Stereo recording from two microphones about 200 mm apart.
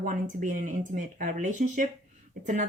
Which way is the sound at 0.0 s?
40° right (ahead or behind).